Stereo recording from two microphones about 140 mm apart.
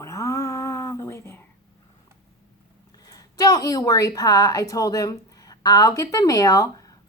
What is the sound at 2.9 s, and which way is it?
A woman's voice, 25° left (ahead or behind).